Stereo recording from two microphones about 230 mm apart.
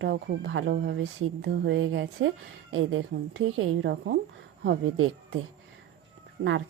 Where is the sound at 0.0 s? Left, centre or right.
Right.